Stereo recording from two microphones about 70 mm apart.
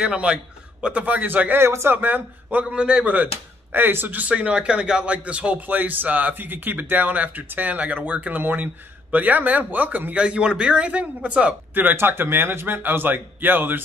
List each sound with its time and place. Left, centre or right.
0.0 s a man's voice: centre
2.6 s a man's voice: centre
3.7 s a man's voice: right
11.7 s a man's voice: right